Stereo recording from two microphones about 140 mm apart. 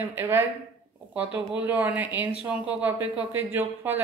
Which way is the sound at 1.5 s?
10° right (ahead or behind).